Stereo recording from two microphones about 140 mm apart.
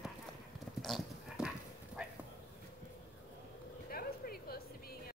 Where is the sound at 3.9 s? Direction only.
90° left.